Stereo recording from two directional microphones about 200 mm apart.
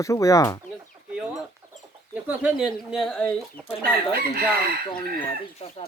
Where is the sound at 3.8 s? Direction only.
50° right (ahead or behind).